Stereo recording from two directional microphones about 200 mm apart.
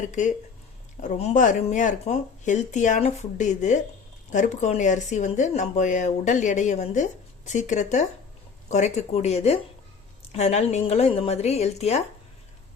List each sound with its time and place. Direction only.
0.1 s speech: 40° left (ahead or behind)